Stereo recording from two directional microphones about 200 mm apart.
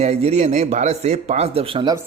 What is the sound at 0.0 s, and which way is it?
A man's voice, 30° right (ahead or behind).